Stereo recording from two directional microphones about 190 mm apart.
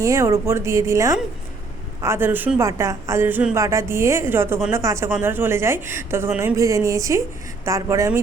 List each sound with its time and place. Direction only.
0.0 s a woman's voice: 15° right (ahead or behind)